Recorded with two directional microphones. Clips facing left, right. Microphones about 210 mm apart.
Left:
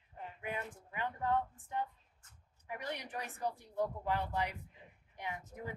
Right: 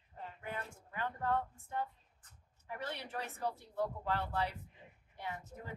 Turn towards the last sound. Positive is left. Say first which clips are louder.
# left 2 dB
turn(degrees=15)  # may be behind; listen again after turning